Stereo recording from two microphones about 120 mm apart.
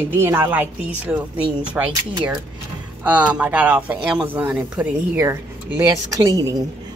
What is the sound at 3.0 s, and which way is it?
Speech, 10° right (ahead or behind).